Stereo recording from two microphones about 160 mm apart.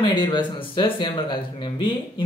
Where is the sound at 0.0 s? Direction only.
25° left (ahead or behind).